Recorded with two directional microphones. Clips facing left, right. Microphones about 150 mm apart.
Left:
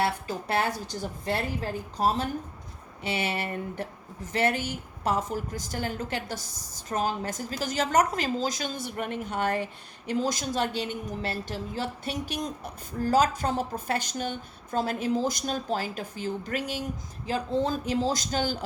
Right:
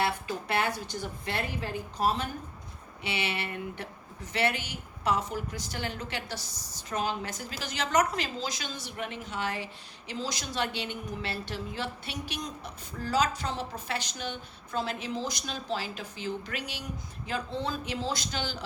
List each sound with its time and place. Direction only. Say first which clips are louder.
0.0 s a woman's voice: left 2 dB; 40° left (ahead or behind)